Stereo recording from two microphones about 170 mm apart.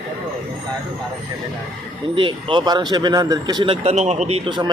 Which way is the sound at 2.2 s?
30° right (ahead or behind).